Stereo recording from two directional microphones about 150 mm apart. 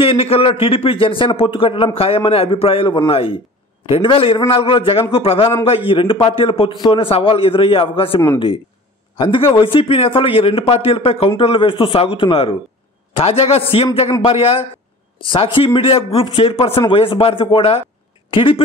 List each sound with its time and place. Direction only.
0.0 s a man's voice: 40° left (ahead or behind)
9.2 s a man's voice: 35° left (ahead or behind)